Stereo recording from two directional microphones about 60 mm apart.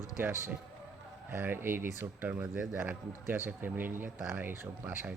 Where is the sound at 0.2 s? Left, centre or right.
Right.